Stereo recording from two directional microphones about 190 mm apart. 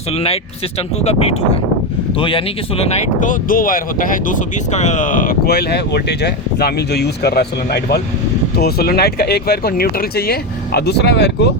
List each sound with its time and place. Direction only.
0.1 s speech: 30° left (ahead or behind); by 11.4 s 60° left (ahead or behind)